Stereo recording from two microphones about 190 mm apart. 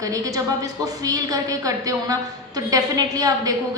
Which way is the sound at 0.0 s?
20° right (ahead or behind).